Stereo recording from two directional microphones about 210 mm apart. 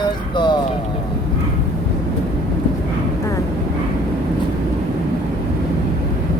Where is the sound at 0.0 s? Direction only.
20° left (ahead or behind).